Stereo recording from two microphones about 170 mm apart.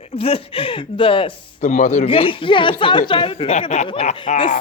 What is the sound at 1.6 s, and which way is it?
Speech, 45° left (ahead or behind).